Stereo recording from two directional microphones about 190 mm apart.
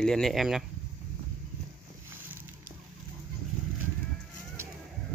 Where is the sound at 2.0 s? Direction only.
10° right (ahead or behind).